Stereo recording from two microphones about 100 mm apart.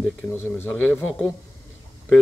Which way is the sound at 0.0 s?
25° left (ahead or behind).